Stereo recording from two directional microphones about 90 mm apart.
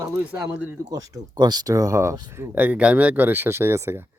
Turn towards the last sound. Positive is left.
turn(degrees=-25)  # may be behind; listen again after turning